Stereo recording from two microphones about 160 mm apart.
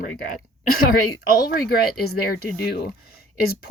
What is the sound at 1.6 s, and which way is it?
Speech, 75° left (ahead or behind).